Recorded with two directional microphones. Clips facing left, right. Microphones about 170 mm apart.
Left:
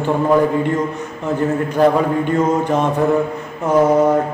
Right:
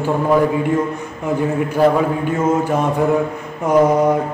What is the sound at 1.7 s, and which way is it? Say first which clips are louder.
A man's voice: even; 5° right (ahead or behind).